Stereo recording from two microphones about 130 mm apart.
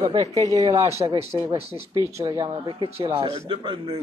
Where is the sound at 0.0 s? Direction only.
25° right (ahead or behind).